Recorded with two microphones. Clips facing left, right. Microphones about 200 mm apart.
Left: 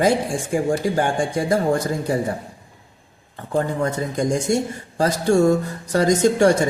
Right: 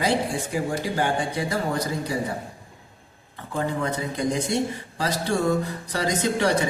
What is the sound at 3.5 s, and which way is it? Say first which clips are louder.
A man's voice: left 5 dB; 45° left (ahead or behind).